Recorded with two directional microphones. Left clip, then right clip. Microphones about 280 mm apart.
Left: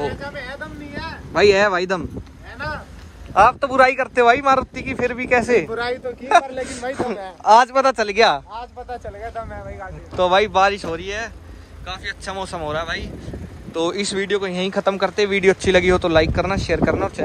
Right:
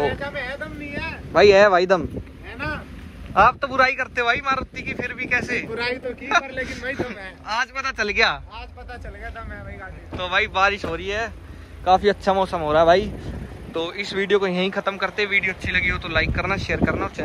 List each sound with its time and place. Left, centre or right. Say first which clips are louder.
0.0 s vehicle: right 2 dB; centre
3.3 s a man's voice: left 3 dB; centre
13.7 s a man's voice: left 3 dB; centre